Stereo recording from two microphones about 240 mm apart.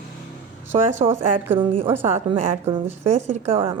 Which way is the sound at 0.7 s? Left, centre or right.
Right.